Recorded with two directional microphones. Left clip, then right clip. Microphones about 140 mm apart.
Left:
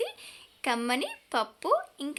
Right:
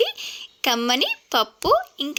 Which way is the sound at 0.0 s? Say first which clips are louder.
Right 12 dB; 35° right (ahead or behind).